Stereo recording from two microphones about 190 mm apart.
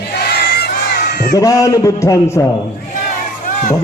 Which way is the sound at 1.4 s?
15° left (ahead or behind).